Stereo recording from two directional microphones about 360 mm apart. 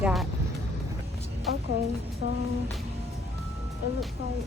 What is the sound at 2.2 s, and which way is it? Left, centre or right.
Music, left.